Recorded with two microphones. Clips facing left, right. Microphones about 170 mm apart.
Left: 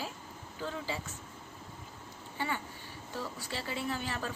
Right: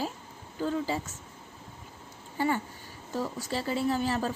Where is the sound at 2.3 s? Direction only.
40° right (ahead or behind).